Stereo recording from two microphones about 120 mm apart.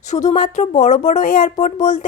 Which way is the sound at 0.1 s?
85° left.